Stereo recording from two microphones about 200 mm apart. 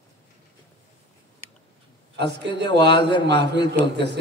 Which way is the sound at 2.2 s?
60° right (ahead or behind).